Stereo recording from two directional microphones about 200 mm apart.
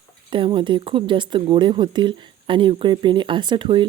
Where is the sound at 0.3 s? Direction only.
25° right (ahead or behind).